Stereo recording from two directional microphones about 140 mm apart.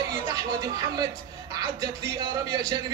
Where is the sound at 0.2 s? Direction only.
25° right (ahead or behind).